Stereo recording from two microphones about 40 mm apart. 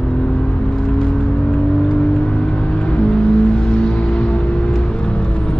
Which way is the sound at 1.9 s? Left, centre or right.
Left.